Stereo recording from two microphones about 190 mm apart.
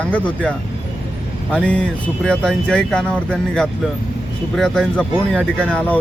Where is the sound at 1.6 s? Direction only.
5° left (ahead or behind).